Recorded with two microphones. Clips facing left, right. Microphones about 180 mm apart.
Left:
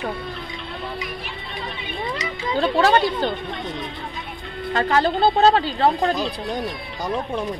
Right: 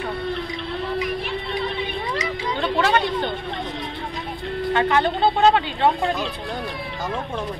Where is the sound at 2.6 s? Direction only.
40° left (ahead or behind).